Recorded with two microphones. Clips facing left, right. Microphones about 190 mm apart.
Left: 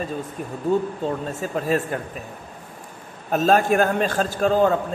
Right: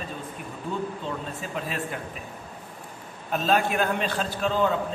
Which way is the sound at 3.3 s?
45° left (ahead or behind).